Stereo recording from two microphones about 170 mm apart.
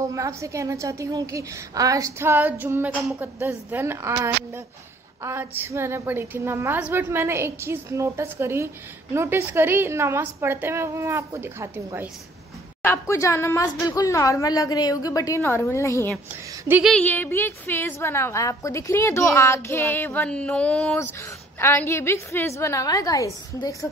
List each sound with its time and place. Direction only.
0.0 s a woman's voice: 20° right (ahead or behind)
12.8 s a woman's voice: 15° left (ahead or behind)
16.6 s a woman's voice: 10° right (ahead or behind)
16.9 s a woman's voice: 10° left (ahead or behind)